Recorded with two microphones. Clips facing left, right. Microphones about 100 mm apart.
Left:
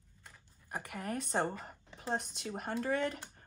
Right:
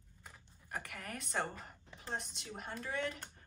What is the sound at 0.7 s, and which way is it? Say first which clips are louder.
Speech: left 5 dB; 25° left (ahead or behind).